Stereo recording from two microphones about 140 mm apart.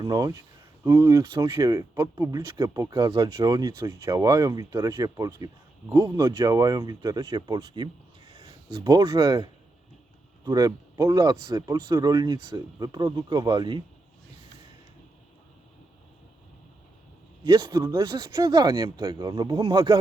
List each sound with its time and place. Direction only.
0.0 s speech: 25° right (ahead or behind)
17.4 s speech: 30° right (ahead or behind)